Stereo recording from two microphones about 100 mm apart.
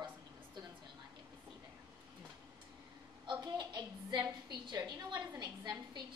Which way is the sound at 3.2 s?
50° right (ahead or behind).